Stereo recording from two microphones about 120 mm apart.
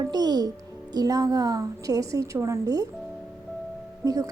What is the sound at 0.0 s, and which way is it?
Music, 35° right (ahead or behind).